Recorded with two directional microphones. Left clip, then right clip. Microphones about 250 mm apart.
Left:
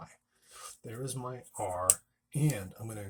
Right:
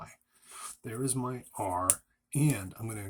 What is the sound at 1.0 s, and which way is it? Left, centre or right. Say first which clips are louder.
Speech: right 5 dB; right.